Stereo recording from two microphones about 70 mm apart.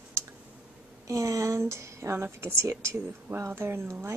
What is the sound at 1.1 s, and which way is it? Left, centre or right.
A woman's voice, right.